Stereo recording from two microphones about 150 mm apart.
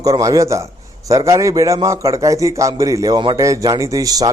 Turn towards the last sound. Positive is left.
turn(degrees=-25)  # may be behind; listen again after turning